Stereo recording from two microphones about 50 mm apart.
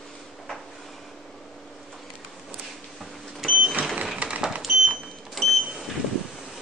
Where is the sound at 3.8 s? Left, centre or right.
Right.